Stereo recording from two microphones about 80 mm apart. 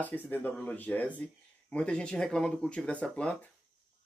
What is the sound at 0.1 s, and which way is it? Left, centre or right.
Speech, left.